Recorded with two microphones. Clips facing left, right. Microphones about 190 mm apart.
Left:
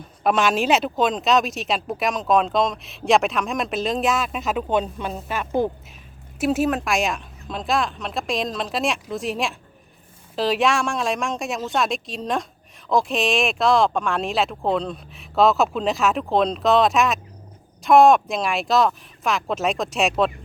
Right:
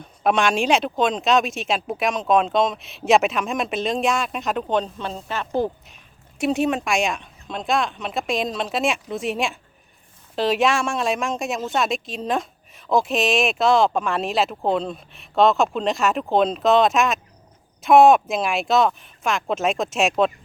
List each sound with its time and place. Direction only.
0.2 s speech: centre (ahead or behind)